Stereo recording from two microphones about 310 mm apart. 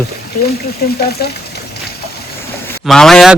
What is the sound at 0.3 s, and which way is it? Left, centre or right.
Speech, left.